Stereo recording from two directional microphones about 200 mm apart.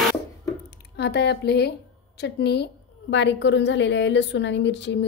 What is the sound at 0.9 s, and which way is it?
A woman's voice, 55° left (ahead or behind).